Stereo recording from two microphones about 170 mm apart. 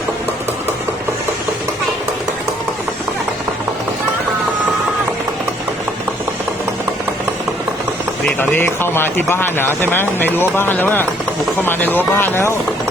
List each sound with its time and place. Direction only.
8.4 s speech: 15° left (ahead or behind)